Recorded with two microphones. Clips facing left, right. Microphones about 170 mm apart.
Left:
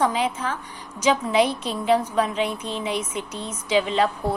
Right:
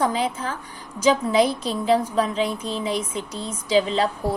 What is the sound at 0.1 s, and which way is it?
A woman's voice, 35° right (ahead or behind).